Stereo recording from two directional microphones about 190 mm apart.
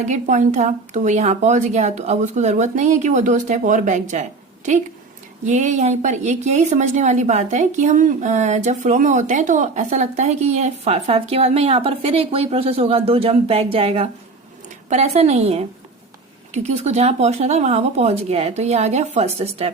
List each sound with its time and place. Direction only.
0.1 s a woman's voice: 40° right (ahead or behind)
16.6 s a woman's voice: 35° right (ahead or behind)